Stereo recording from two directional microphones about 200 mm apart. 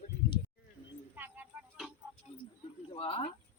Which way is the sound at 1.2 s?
10° right (ahead or behind).